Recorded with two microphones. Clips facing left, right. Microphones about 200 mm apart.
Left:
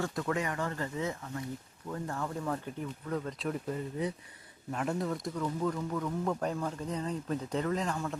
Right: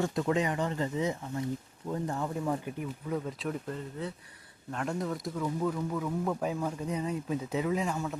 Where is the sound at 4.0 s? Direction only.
15° left (ahead or behind).